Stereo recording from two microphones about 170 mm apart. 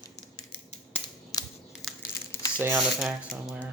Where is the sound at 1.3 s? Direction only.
20° left (ahead or behind).